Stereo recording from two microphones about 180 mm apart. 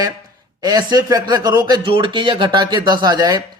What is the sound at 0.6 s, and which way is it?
Speech, 20° right (ahead or behind).